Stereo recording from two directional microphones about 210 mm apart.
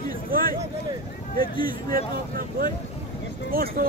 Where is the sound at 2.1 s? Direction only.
45° right (ahead or behind).